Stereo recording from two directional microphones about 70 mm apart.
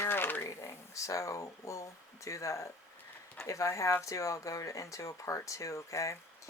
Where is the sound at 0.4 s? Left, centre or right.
Left.